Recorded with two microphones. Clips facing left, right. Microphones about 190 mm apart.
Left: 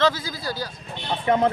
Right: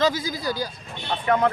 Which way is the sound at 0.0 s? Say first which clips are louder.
Even; 15° right (ahead or behind).